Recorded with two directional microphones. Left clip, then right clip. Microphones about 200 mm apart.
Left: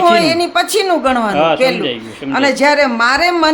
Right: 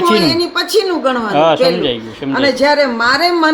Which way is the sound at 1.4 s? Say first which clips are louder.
Right 5 dB; 20° right (ahead or behind).